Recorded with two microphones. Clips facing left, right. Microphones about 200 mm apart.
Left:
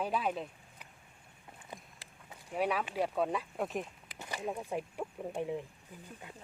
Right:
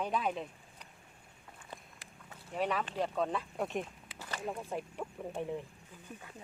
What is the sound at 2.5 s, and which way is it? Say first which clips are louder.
Speech: left 1 dB; 10° left (ahead or behind).